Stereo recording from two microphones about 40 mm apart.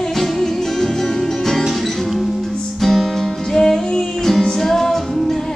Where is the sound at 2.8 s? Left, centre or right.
Centre.